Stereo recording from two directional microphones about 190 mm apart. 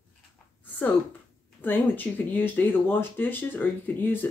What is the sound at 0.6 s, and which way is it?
Speech, 10° left (ahead or behind).